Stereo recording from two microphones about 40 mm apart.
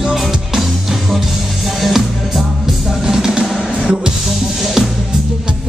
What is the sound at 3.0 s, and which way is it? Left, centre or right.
Music, centre.